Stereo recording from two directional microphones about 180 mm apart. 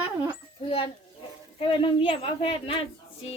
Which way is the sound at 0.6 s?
30° left (ahead or behind).